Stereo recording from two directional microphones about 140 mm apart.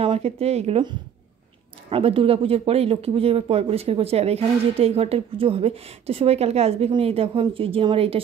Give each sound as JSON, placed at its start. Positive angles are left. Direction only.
{"t": 0.0, "sound": "speech", "side_deg": -45}
{"t": 1.9, "sound": "speech", "side_deg": -40}